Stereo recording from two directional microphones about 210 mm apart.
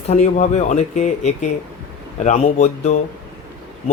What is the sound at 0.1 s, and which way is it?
A man's voice, 30° left (ahead or behind).